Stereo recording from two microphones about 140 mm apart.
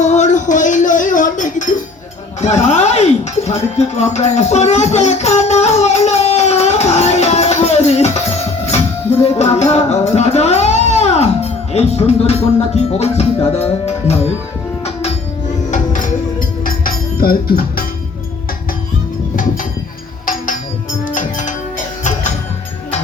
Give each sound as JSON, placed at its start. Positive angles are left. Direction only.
{"t": 0.0, "sound": "a sound", "side_deg": 60}
{"t": 2.4, "sound": "music", "side_deg": 55}
{"t": 9.4, "sound": "music", "side_deg": 50}
{"t": 15.7, "sound": "music", "side_deg": 65}
{"t": 20.2, "sound": "music", "side_deg": 75}